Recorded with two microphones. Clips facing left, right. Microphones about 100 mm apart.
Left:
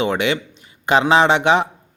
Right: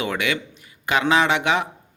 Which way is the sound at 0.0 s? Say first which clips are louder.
Left 5 dB; 25° left (ahead or behind).